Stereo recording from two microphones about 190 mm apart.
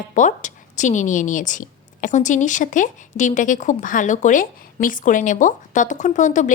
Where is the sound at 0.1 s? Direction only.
40° left (ahead or behind).